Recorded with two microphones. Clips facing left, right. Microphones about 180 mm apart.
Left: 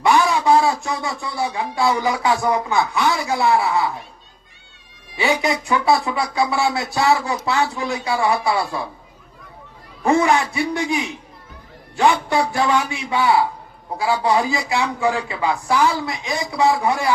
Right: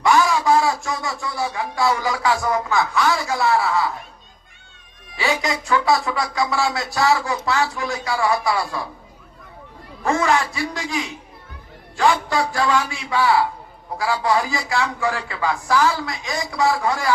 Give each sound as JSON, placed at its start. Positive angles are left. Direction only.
{"t": 0.0, "sound": "a sound", "side_deg": 20}
{"t": 0.9, "sound": "speech", "side_deg": 20}
{"t": 5.1, "sound": "speech", "side_deg": 20}
{"t": 10.0, "sound": "speech", "side_deg": 20}